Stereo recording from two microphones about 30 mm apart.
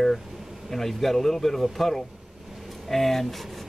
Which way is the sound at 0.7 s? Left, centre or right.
Centre.